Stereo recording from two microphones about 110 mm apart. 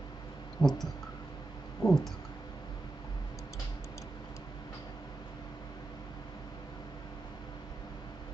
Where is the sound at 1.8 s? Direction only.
5° left (ahead or behind).